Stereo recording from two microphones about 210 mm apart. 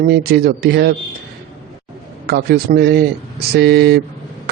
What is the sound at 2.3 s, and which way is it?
A man's voice, 50° right (ahead or behind).